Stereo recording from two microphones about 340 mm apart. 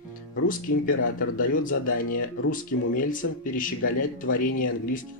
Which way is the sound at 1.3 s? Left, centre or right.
Left.